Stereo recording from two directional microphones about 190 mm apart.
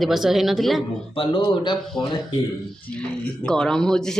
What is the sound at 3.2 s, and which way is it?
Speech, 5° left (ahead or behind).